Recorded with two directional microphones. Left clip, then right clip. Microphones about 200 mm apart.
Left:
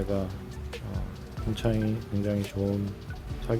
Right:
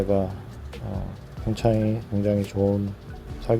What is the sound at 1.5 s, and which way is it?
Speech, 25° right (ahead or behind).